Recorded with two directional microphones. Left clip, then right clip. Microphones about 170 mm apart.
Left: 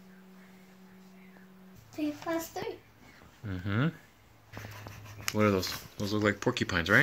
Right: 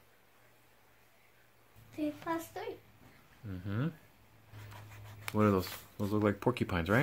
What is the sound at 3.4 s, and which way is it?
Speech, 30° left (ahead or behind).